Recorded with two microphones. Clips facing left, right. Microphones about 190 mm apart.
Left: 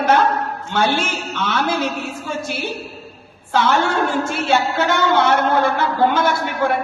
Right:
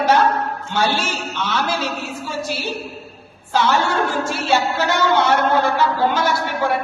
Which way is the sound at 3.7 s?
50° left (ahead or behind).